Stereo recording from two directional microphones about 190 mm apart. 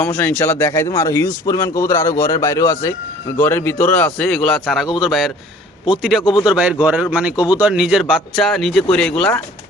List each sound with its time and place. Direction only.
0.0 s a man's voice: 10° left (ahead or behind)
7.3 s speech: 20° left (ahead or behind)
7.6 s a man's voice: 5° right (ahead or behind)